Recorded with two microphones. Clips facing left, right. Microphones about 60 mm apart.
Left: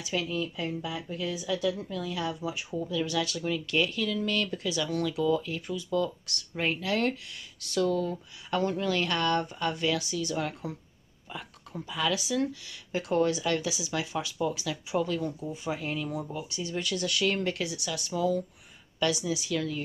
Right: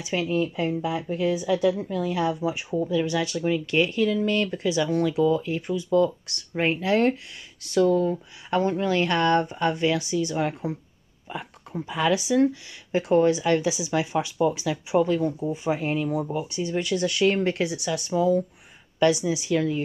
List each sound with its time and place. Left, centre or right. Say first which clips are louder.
0.0 s a woman's voice: right 6 dB; right